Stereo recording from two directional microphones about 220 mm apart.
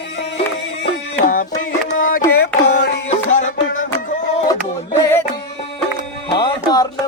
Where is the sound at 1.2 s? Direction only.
40° left (ahead or behind).